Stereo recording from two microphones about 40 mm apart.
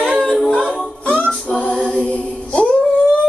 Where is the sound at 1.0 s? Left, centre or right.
Left.